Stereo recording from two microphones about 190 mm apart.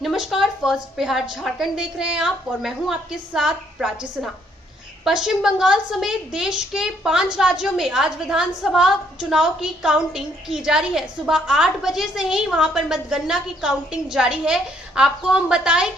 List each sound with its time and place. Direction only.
0.0 s a woman's voice: centre (ahead or behind)